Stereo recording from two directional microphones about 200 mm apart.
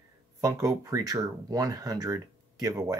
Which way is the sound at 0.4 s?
15° right (ahead or behind).